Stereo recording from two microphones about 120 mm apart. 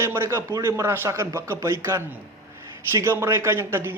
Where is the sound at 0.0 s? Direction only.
20° right (ahead or behind).